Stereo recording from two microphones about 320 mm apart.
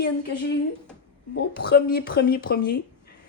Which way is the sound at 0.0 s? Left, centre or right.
Left.